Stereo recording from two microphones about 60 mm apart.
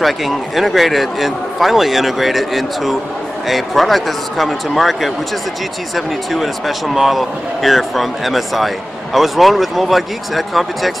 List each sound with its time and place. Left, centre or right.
0.0 s speech: centre